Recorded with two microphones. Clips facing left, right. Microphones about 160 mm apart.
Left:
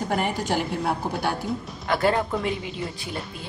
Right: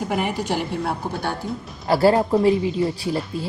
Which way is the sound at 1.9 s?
35° right (ahead or behind).